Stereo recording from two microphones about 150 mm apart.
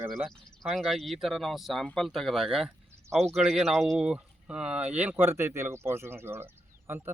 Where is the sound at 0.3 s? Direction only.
Centre (ahead or behind).